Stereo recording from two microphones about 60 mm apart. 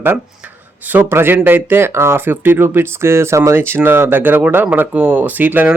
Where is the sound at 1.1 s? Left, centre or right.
Right.